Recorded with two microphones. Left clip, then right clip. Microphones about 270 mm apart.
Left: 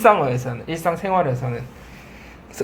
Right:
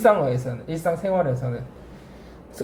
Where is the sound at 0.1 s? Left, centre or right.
Centre.